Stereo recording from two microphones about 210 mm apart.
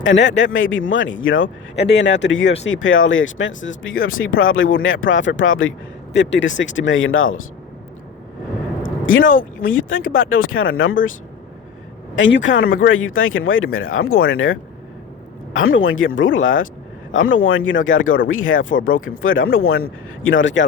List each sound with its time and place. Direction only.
0.0 s speech: 60° left (ahead or behind)
6.1 s speech: 60° left (ahead or behind)
9.1 s speech: 40° left (ahead or behind)
9.9 s speech: 70° left (ahead or behind)
12.1 s speech: 60° left (ahead or behind)